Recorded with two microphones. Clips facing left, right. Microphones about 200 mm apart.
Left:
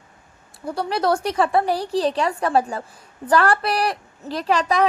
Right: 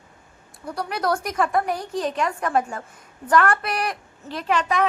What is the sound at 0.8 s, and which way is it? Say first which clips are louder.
A woman's voice: left 4 dB; 30° left (ahead or behind).